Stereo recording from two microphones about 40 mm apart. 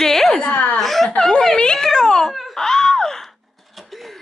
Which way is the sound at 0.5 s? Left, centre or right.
Left.